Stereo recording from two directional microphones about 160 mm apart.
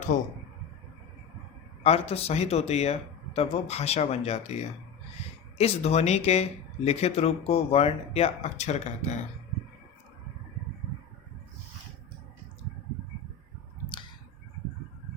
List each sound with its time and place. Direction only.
0.1 s speech: 55° left (ahead or behind)
1.8 s speech: 40° left (ahead or behind)